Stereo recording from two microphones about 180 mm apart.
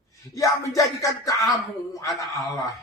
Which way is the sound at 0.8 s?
20° left (ahead or behind).